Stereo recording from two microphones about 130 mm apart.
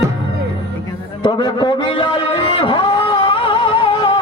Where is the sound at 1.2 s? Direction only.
35° left (ahead or behind).